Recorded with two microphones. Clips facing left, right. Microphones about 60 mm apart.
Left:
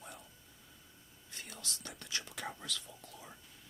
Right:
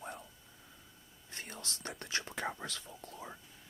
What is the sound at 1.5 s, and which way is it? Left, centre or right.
Speech, right.